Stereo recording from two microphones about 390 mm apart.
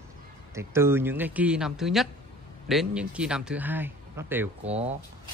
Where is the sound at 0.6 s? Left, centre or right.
Centre.